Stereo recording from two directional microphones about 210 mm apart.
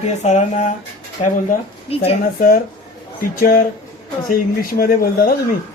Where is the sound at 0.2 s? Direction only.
35° left (ahead or behind).